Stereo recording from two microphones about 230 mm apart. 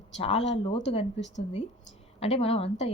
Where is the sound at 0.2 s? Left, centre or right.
Left.